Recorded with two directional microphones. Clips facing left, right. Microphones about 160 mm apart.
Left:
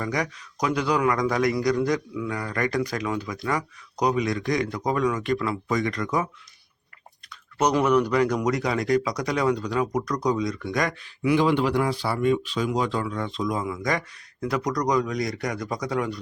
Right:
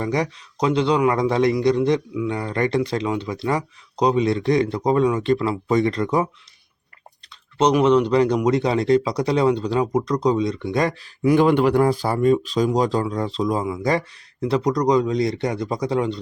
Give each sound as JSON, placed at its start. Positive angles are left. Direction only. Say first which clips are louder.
{"t": 0.0, "sound": "speech", "louder": "right 5 dB", "side_deg": -30}
{"t": 7.6, "sound": "speech", "louder": "right 4 dB", "side_deg": -20}